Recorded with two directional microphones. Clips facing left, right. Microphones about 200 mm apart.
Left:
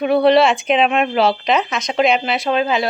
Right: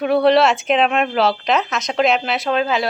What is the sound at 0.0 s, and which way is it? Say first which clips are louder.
Speech: left 1 dB; centre (ahead or behind).